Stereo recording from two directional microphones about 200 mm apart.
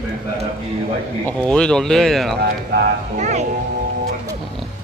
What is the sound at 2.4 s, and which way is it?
Speech, 55° right (ahead or behind).